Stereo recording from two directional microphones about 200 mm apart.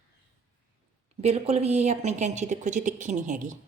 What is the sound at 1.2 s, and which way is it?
A woman's voice, 30° right (ahead or behind).